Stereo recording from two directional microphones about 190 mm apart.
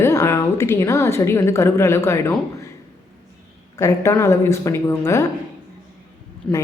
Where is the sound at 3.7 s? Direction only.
15° left (ahead or behind).